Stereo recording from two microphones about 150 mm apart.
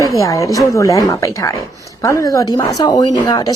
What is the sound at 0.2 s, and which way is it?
Speech, 20° left (ahead or behind).